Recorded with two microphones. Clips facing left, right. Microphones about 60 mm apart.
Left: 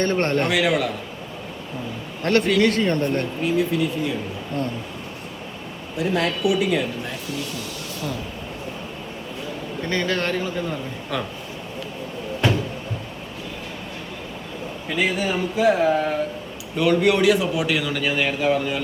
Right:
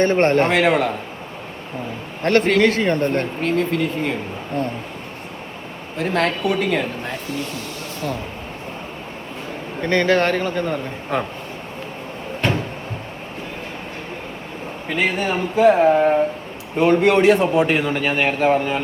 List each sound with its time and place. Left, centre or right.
0.0 s a man's voice: right
0.4 s a man's voice: right
2.2 s a man's voice: right
2.8 s speech: right
3.4 s a man's voice: right
4.6 s speech: right
6.0 s a man's voice: right
9.8 s a man's voice: right
10.1 s a man's voice: right
11.1 s speech: right
14.9 s a man's voice: right
16.7 s a man's voice: right